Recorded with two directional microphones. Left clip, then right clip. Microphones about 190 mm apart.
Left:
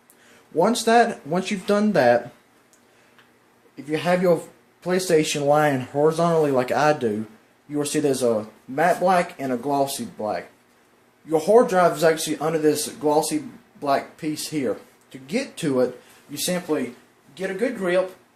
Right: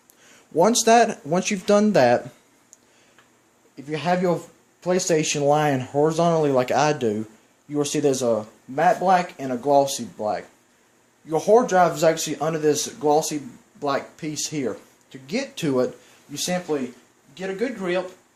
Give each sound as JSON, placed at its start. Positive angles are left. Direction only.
{"t": 0.5, "sound": "speech", "side_deg": -45}
{"t": 3.8, "sound": "speech", "side_deg": -30}
{"t": 17.6, "sound": "speech", "side_deg": -30}